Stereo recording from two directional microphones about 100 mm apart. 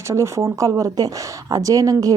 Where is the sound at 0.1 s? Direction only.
30° right (ahead or behind).